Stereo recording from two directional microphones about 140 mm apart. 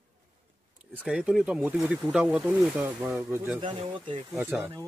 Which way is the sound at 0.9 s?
5° right (ahead or behind).